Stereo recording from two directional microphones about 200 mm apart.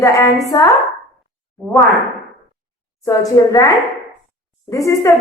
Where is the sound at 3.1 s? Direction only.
15° left (ahead or behind).